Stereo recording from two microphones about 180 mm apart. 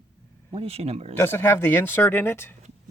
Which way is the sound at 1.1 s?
10° left (ahead or behind).